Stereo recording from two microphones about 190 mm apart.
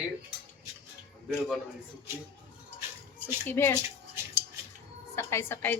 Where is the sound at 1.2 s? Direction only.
Centre (ahead or behind).